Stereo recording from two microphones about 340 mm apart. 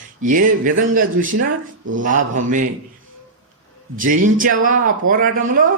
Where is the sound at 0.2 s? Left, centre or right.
Right.